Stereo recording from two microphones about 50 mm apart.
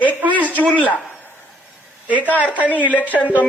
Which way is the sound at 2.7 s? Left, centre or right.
Left.